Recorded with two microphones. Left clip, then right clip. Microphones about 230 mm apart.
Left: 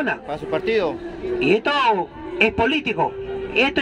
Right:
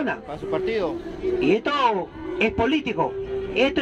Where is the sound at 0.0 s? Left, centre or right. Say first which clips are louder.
Left 3 dB; left.